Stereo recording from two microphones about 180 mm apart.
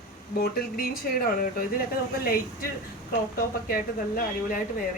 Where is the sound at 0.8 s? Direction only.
55° left (ahead or behind).